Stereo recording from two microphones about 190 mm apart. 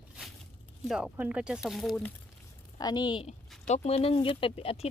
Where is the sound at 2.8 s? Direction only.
20° left (ahead or behind).